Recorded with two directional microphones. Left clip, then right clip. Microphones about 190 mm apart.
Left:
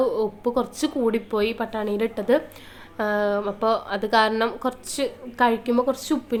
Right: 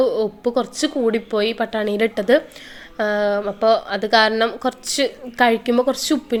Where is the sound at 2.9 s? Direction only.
Centre (ahead or behind).